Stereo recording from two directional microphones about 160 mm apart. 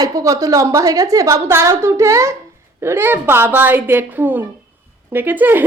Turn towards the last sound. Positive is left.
turn(degrees=-10)  # may be behind; listen again after turning